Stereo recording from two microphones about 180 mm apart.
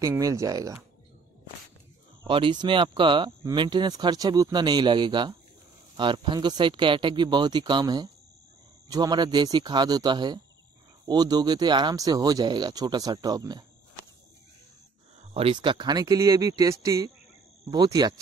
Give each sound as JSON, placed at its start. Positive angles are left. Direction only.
{"t": 0.0, "sound": "speech", "side_deg": -20}
{"t": 2.2, "sound": "speech", "side_deg": -30}
{"t": 15.3, "sound": "speech", "side_deg": -30}